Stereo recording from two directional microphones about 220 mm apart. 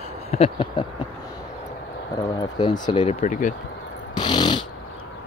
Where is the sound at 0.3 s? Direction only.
25° left (ahead or behind).